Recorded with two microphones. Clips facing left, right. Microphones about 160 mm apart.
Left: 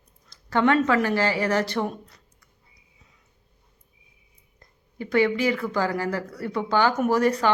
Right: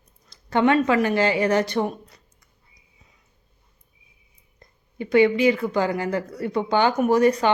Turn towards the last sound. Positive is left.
turn(degrees=-20)  # may be behind; listen again after turning